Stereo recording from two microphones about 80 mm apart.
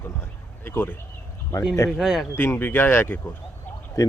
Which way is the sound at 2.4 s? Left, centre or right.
Left.